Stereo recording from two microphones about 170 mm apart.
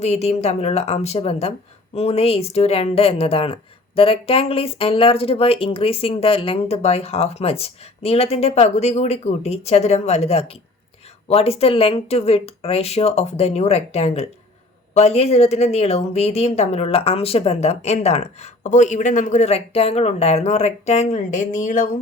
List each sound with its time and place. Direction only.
0.0 s speech: 40° left (ahead or behind)